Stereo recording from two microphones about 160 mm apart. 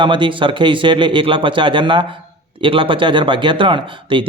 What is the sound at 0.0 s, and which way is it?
Speech, 30° right (ahead or behind).